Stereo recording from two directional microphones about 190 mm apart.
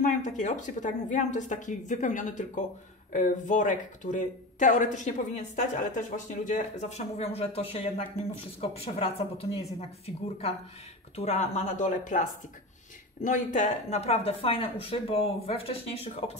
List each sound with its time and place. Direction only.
0.0 s speech: 40° left (ahead or behind)